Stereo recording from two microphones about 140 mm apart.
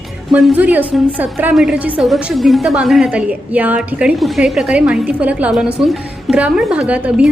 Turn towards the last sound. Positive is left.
turn(degrees=-10)  # may be behind; listen again after turning